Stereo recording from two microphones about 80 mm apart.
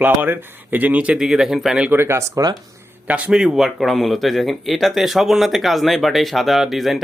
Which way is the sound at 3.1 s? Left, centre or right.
Centre.